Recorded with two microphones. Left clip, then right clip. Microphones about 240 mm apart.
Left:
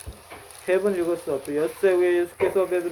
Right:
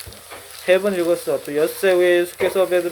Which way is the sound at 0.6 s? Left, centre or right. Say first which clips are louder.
Right 5 dB; right.